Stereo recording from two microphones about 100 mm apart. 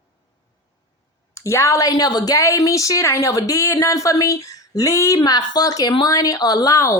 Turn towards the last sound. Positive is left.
turn(degrees=35)  # may be behind; listen again after turning